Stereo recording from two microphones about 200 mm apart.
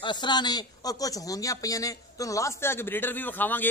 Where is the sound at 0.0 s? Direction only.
20° left (ahead or behind).